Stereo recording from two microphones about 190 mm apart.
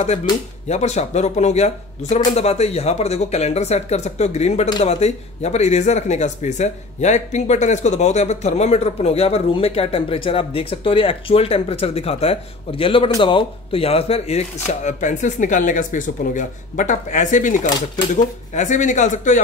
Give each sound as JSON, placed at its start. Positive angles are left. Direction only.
{"t": 0.0, "sound": "speech", "side_deg": 35}